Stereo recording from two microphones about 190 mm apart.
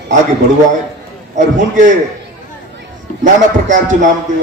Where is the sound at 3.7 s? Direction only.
40° right (ahead or behind).